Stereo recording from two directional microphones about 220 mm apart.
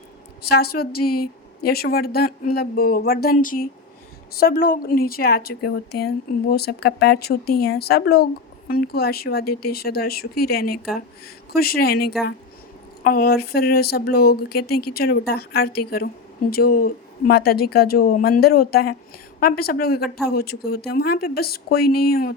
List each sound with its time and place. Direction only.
0.5 s a woman's voice: 45° left (ahead or behind)